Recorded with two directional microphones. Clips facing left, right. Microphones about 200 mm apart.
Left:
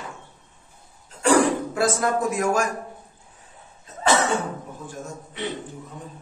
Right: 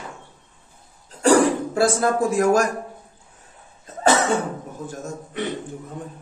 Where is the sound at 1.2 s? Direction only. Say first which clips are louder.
Right 2 dB; 35° right (ahead or behind).